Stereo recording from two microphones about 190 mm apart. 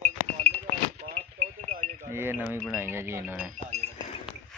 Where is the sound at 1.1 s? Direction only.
35° right (ahead or behind).